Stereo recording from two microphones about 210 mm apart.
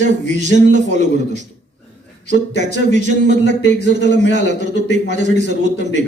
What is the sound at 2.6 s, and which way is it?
A man's voice, 35° right (ahead or behind).